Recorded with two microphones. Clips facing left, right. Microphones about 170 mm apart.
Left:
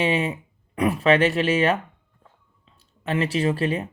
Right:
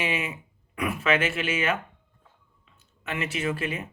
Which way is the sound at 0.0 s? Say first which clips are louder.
Left 7 dB; 35° left (ahead or behind).